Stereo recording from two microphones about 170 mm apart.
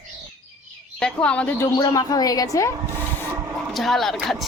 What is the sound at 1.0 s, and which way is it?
A woman's voice, 5° left (ahead or behind).